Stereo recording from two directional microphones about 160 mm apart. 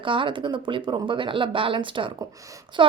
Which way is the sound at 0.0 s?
30° right (ahead or behind).